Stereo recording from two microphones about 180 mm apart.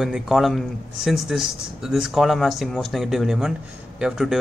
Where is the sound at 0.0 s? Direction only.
Centre (ahead or behind).